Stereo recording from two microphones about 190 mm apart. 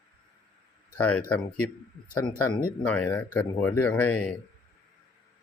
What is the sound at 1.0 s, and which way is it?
Speech, 5° left (ahead or behind).